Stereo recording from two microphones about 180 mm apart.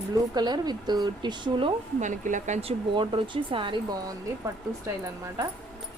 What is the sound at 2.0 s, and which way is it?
Speech, 45° right (ahead or behind).